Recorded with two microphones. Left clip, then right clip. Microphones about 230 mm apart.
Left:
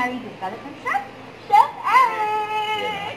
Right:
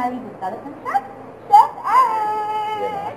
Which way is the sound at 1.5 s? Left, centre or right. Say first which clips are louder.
Right 3 dB; left.